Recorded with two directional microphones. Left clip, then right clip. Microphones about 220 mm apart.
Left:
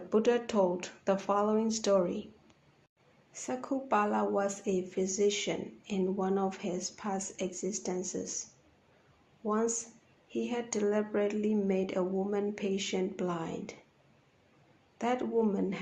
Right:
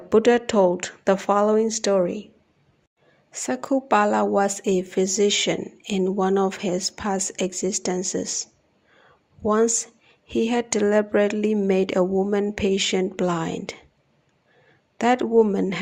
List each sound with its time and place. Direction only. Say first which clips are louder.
0.1 s speech: right 11 dB; 35° right (ahead or behind)
3.3 s speech: right 11 dB; 35° right (ahead or behind)
9.5 s speech: right 12 dB; 40° right (ahead or behind)
14.9 s speech: right 13 dB; 40° right (ahead or behind)